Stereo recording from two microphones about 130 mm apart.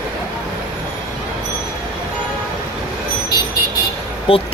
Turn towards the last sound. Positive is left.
turn(degrees=45)  # may be behind; listen again after turning